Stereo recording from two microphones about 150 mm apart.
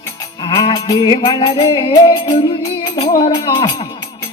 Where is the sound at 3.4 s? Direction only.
30° left (ahead or behind).